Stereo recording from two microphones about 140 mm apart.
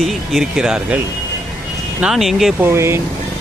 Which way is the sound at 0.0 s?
Centre (ahead or behind).